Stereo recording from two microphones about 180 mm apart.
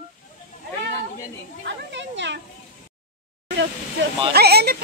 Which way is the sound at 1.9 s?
80° right.